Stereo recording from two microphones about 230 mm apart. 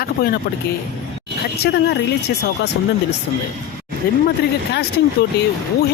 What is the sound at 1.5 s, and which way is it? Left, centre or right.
Speech, left.